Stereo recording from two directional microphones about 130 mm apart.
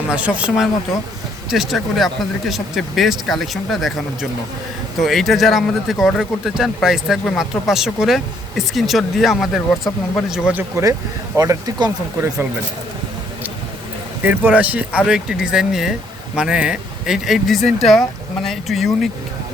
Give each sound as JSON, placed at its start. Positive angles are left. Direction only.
{"t": 0.1, "sound": "speech", "side_deg": -10}
{"t": 11.3, "sound": "speech", "side_deg": -30}
{"t": 14.3, "sound": "speech", "side_deg": -10}